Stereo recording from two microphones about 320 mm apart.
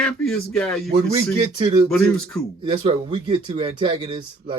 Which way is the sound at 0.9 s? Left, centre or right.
Centre.